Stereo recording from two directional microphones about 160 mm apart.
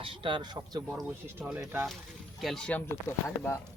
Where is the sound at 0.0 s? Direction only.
35° right (ahead or behind).